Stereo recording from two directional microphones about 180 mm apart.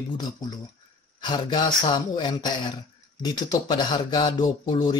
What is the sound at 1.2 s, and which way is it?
Speech, 25° left (ahead or behind).